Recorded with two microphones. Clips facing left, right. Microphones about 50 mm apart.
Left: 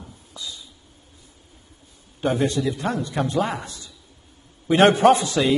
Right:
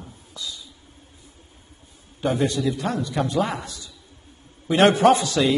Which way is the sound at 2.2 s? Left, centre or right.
Left.